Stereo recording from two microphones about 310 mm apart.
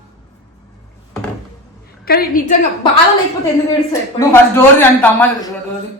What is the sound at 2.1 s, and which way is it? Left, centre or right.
Speech, left.